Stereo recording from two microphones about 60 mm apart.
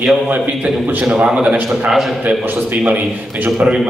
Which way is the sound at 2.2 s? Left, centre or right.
Right.